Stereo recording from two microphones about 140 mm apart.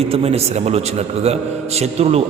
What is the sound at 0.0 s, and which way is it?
A man's voice, 45° right (ahead or behind).